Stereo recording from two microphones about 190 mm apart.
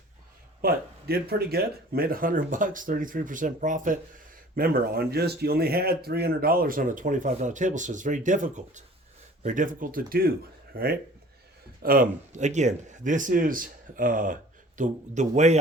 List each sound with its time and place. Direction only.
0.6 s speech: 55° right (ahead or behind); by 15.5 s 40° right (ahead or behind)